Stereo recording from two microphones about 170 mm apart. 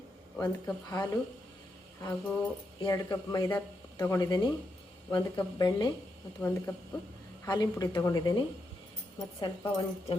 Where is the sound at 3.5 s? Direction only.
10° left (ahead or behind).